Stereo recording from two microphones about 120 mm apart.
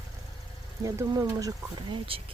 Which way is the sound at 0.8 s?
30° right (ahead or behind).